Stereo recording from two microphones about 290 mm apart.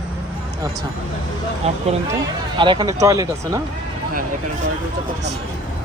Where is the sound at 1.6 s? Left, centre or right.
Right.